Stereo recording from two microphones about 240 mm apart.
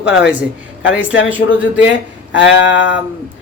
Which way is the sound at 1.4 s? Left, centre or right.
Left.